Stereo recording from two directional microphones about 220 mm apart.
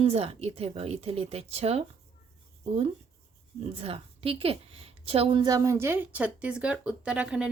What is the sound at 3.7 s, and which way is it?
A woman's voice, 25° right (ahead or behind).